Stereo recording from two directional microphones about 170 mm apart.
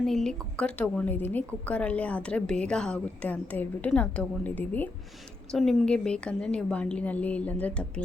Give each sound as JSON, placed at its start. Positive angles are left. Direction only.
{"t": 0.0, "sound": "a woman's voice", "side_deg": 5}